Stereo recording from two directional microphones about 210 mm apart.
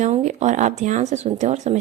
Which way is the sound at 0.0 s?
35° right (ahead or behind).